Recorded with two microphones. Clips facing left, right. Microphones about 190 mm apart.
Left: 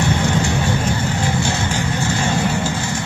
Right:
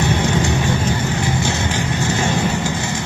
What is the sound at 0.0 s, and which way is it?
Vehicle, 20° right (ahead or behind).